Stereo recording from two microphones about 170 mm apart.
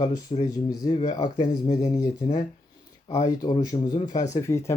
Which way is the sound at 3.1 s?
20° left (ahead or behind).